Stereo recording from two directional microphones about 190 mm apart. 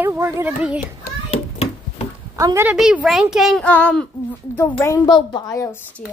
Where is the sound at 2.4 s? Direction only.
15° right (ahead or behind).